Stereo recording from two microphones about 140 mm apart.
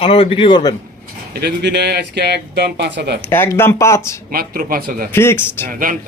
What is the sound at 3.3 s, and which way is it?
Speech, 15° left (ahead or behind).